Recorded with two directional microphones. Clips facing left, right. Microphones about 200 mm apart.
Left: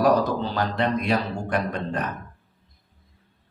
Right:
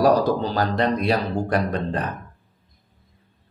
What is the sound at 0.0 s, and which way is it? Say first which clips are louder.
Speech: right 2 dB; 40° right (ahead or behind).